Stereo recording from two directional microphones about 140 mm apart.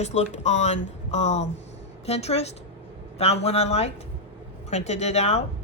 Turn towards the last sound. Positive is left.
turn(degrees=50)  # may be behind; listen again after turning